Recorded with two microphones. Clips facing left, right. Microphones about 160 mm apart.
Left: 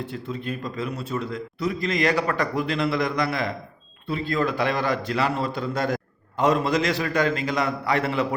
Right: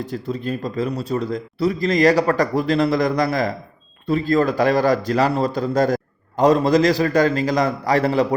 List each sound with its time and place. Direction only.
0.0 s a man's voice: 40° right (ahead or behind)